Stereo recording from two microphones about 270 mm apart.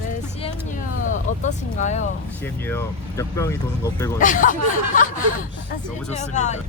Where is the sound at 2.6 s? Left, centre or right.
Centre.